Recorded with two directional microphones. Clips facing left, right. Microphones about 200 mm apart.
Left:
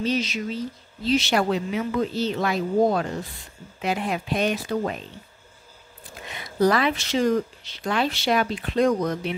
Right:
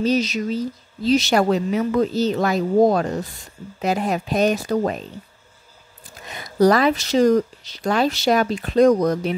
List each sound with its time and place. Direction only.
0.0 s speech: 40° right (ahead or behind)
6.2 s speech: 40° right (ahead or behind)